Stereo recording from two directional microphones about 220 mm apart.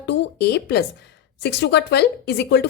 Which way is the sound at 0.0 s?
50° left (ahead or behind).